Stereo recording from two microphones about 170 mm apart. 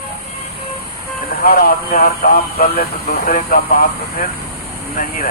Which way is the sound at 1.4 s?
60° left (ahead or behind).